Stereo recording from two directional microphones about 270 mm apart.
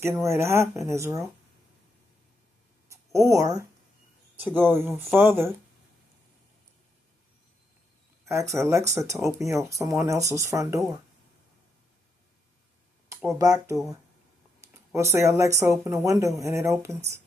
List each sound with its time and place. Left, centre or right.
0.0 s speech: centre
2.9 s speech: centre
8.2 s speech: centre
13.2 s speech: centre